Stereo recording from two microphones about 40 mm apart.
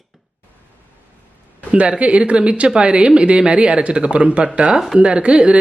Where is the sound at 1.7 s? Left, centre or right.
Right.